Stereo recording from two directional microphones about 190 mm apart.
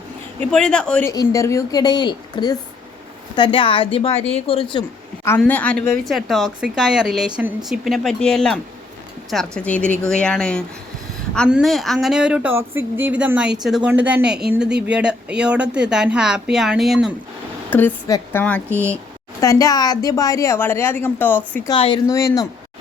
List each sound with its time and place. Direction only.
0.3 s speech: 5° left (ahead or behind)
1.0 s a woman's voice: 20° left (ahead or behind)
5.4 s speech: 5° left (ahead or behind)
17.7 s a woman's voice: 10° left (ahead or behind)
18.7 s speech: 10° right (ahead or behind)
19.4 s a woman's voice: 20° left (ahead or behind)
21.7 s a woman's voice: 25° left (ahead or behind)